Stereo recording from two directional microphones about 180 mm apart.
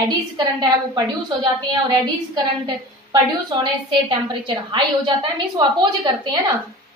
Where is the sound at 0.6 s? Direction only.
20° right (ahead or behind).